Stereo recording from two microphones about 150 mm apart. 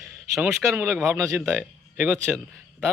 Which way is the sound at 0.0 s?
Centre (ahead or behind).